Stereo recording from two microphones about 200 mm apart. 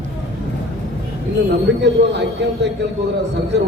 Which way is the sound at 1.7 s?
60° right (ahead or behind).